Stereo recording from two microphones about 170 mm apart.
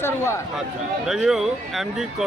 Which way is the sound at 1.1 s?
5° right (ahead or behind).